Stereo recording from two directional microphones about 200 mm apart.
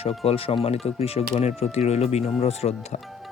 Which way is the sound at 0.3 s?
30° left (ahead or behind).